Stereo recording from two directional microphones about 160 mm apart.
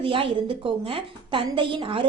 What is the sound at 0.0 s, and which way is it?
A woman's voice, 35° right (ahead or behind).